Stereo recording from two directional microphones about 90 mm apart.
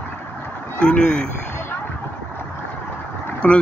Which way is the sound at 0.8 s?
10° left (ahead or behind).